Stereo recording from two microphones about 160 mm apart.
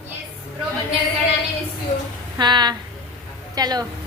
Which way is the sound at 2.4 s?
25° right (ahead or behind).